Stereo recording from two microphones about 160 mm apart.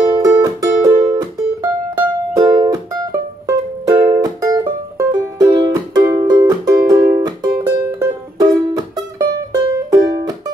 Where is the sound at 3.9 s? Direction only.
25° right (ahead or behind).